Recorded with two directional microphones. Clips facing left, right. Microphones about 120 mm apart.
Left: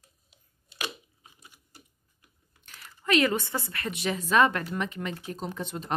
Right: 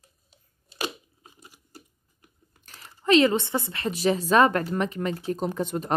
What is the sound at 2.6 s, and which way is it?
Speech, 40° right (ahead or behind).